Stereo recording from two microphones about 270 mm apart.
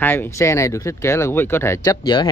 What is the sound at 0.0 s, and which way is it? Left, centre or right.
Speech, centre.